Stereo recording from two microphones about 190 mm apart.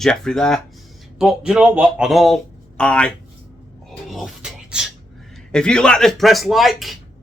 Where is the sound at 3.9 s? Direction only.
Centre (ahead or behind).